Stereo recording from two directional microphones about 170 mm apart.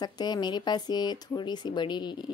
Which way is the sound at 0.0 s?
25° left (ahead or behind).